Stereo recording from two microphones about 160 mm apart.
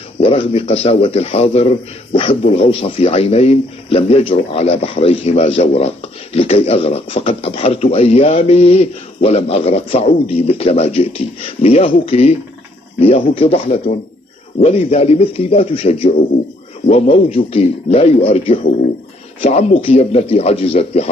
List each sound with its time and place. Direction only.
0.2 s a man's voice: 35° left (ahead or behind)